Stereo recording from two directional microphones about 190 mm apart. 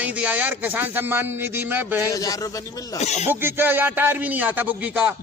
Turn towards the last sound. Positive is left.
turn(degrees=-10)  # may be behind; listen again after turning